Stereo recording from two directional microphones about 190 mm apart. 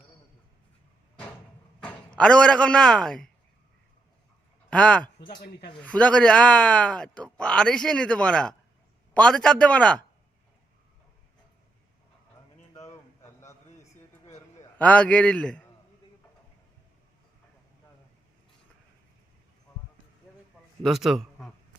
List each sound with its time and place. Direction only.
2.1 s speech: 5° left (ahead or behind)
4.7 s speech: 5° left (ahead or behind)
12.7 s a sound: 15° left (ahead or behind)
14.8 s a man's voice: 5° left (ahead or behind)
20.8 s speech: centre (ahead or behind)